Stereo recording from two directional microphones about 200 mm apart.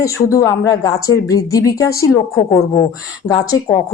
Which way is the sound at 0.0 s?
15° left (ahead or behind).